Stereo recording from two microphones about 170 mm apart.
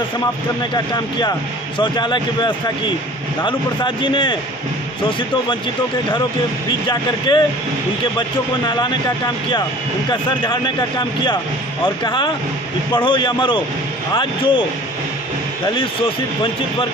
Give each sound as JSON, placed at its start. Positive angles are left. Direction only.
{"t": 0.7, "sound": "speech", "side_deg": 25}
{"t": 6.9, "sound": "speech", "side_deg": 25}
{"t": 8.6, "sound": "speech", "side_deg": 25}
{"t": 10.0, "sound": "speech", "side_deg": 25}